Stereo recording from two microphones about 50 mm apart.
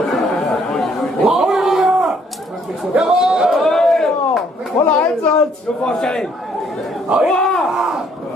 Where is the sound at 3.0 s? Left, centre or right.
Centre.